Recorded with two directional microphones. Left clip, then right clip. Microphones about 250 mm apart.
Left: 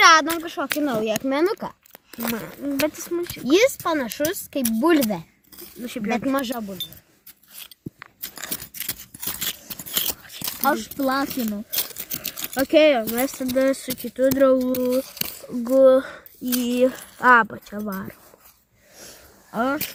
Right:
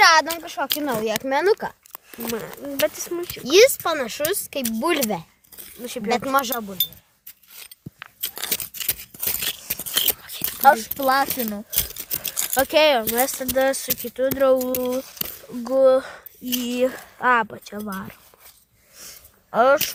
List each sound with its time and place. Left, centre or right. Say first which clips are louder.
0.0 s a sound: left 1 dB; centre
1.0 s speech: right 5 dB; centre
3.4 s speech: right 4 dB; centre
5.6 s speech: right 1 dB; centre
6.1 s speech: right 4 dB; right
7.9 s a sound: right 9 dB; centre
10.6 s speech: right 6 dB; right
12.5 s speech: left 1 dB; centre
17.2 s speech: left 4 dB; centre
19.5 s speech: right 8 dB; right